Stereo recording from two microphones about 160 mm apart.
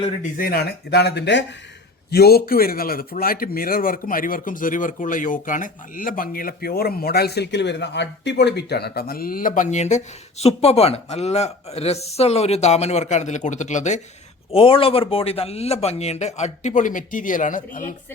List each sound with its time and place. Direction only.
0.2 s speech: 65° left (ahead or behind); by 1.5 s 90° left
2.0 s a man's voice: 80° left; by 14.0 s 50° left (ahead or behind)
14.5 s speech: 35° left (ahead or behind); by 17.9 s 55° left (ahead or behind)